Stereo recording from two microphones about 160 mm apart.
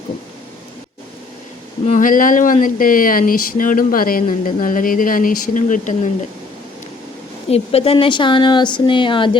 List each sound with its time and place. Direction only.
1.9 s speech: 55° left (ahead or behind)
7.5 s speech: 40° left (ahead or behind)